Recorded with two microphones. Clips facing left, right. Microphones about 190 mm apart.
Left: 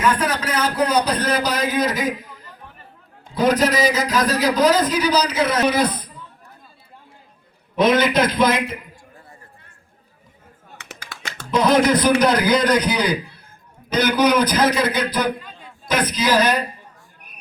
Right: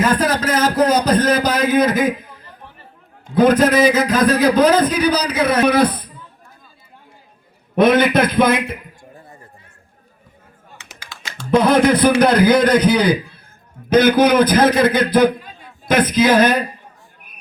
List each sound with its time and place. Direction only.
0.0 s a sound: 40° right (ahead or behind)
3.3 s a man's voice: 55° right (ahead or behind)
7.8 s a man's voice: 55° right (ahead or behind)
11.5 s a man's voice: 55° right (ahead or behind)